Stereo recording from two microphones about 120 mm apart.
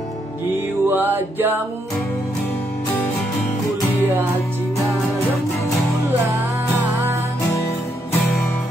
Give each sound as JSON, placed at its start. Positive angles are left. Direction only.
{"t": 0.8, "sound": "music", "side_deg": -15}